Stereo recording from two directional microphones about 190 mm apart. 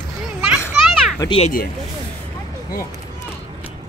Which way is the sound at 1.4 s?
45° left (ahead or behind).